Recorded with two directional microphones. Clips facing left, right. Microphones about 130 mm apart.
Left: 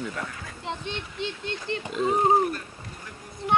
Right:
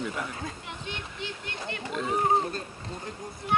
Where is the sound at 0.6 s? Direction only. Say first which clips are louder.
Left 5 dB; 25° left (ahead or behind).